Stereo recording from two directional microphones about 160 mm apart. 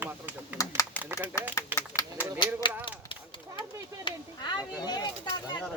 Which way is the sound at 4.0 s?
30° left (ahead or behind).